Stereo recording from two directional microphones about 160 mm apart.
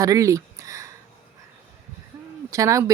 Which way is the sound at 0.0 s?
20° right (ahead or behind).